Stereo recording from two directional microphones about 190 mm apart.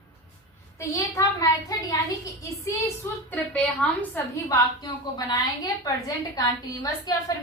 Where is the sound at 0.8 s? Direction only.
15° left (ahead or behind).